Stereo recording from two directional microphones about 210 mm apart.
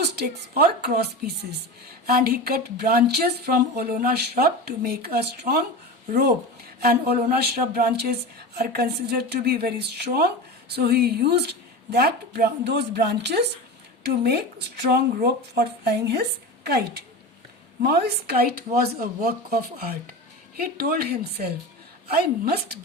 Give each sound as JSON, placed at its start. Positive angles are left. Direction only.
{"t": 0.0, "sound": "speech", "side_deg": -50}